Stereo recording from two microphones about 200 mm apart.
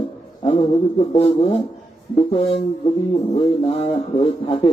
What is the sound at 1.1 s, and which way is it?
Speech, 30° left (ahead or behind).